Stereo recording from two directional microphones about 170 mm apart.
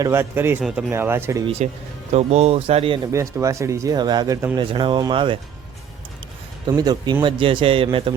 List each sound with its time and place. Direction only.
0.0 s speech: 15° right (ahead or behind)
2.1 s a man's voice: 40° right (ahead or behind)
3.1 s speech: 15° right (ahead or behind)
4.7 s speech: 30° right (ahead or behind)
6.7 s a man's voice: 25° right (ahead or behind)